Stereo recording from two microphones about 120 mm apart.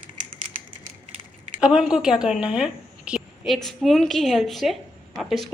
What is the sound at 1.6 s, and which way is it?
A woman's voice, 5° right (ahead or behind).